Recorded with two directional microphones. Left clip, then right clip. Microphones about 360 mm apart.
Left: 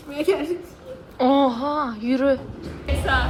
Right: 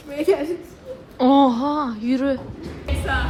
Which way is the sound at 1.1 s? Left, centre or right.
Centre.